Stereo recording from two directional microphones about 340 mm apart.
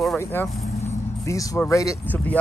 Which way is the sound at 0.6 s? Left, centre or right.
Centre.